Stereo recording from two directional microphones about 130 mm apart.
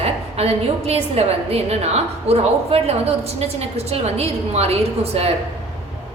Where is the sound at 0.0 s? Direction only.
50° right (ahead or behind).